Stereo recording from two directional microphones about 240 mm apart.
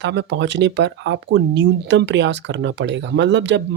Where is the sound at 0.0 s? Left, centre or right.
Right.